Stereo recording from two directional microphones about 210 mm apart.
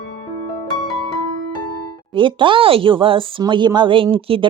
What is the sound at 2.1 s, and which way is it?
Speech, 25° right (ahead or behind).